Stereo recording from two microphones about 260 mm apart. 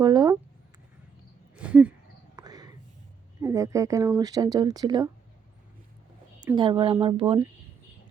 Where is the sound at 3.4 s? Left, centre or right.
Centre.